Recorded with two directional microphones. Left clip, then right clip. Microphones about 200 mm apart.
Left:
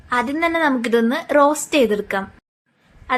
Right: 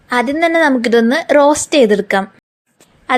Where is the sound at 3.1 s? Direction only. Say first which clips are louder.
Right 6 dB; 40° right (ahead or behind).